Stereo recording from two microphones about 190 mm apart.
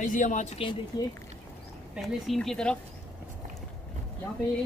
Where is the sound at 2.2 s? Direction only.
5° left (ahead or behind).